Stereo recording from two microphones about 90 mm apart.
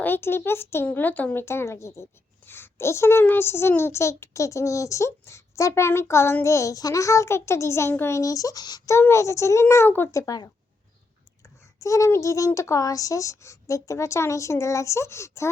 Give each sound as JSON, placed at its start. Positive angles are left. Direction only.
{"t": 0.0, "sound": "a woman's voice", "side_deg": 25}
{"t": 8.9, "sound": "a child's voice", "side_deg": 30}